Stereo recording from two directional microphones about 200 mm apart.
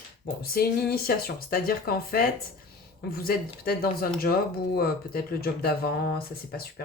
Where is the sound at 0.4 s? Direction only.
50° left (ahead or behind).